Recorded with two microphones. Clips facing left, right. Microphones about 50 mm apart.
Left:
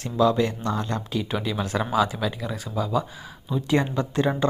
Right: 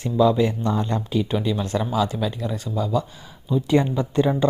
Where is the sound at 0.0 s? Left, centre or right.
Centre.